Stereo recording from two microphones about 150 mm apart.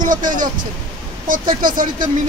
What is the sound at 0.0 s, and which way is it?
Speech, 60° right (ahead or behind).